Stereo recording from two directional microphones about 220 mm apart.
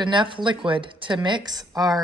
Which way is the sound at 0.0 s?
20° right (ahead or behind).